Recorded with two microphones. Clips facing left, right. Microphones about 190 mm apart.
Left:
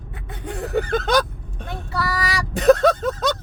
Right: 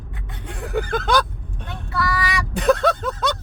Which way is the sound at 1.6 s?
40° left (ahead or behind).